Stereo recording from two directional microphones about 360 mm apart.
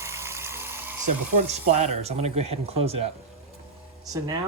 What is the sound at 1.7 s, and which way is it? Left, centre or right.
Speech, centre.